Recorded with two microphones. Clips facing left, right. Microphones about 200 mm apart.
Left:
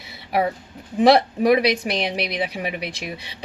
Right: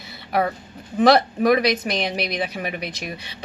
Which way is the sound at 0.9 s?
10° left (ahead or behind).